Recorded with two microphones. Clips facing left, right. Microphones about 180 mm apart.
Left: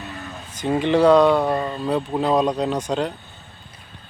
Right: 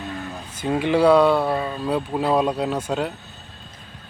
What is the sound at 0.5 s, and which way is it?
Speech, 10° right (ahead or behind).